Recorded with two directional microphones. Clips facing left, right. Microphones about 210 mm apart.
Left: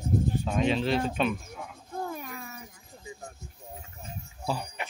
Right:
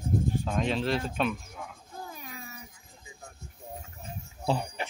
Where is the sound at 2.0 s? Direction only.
55° left (ahead or behind).